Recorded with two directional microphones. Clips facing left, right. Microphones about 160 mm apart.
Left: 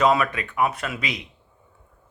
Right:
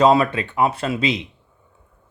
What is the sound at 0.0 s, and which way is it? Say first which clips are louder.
Speech: right 5 dB; 30° right (ahead or behind).